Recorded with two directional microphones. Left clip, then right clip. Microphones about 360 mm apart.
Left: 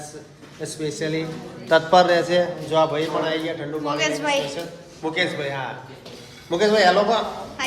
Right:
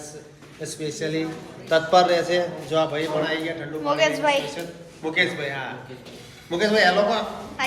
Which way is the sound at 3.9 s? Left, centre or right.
Centre.